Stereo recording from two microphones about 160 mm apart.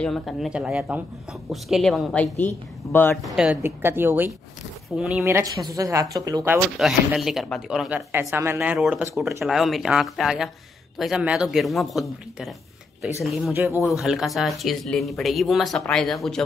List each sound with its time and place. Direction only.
0.0 s speech: centre (ahead or behind)
2.3 s speech: 10° left (ahead or behind)
3.3 s a woman's voice: 5° right (ahead or behind)
5.2 s speech: 20° right (ahead or behind)
6.8 s speech: centre (ahead or behind)
8.1 s a woman's voice: 15° right (ahead or behind)
9.4 s speech: centre (ahead or behind)
13.5 s a woman's voice: 15° right (ahead or behind)
13.8 s speech: centre (ahead or behind)